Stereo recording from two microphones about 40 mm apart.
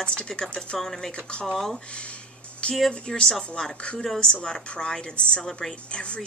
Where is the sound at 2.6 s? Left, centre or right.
Left.